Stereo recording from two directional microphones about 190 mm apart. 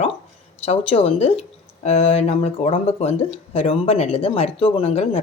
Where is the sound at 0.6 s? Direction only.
30° left (ahead or behind).